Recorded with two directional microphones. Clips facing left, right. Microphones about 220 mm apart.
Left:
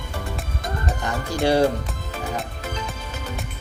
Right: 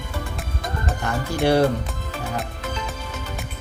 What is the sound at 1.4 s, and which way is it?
Speech, 20° left (ahead or behind).